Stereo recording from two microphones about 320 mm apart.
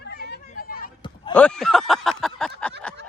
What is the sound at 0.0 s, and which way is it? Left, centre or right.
Vehicle, left.